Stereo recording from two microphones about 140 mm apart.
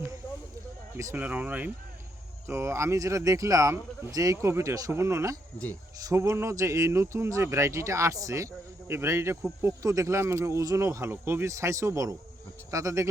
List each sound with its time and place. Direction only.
0.9 s speech: 15° right (ahead or behind)